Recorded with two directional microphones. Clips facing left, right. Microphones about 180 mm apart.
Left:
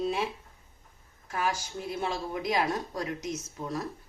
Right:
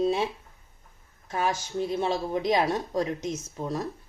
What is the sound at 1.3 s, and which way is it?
Speech, 25° right (ahead or behind).